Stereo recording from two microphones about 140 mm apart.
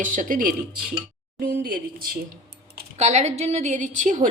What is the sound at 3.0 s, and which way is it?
A woman's voice, 55° right (ahead or behind).